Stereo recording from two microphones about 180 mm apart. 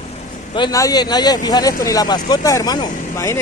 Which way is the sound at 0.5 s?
20° left (ahead or behind).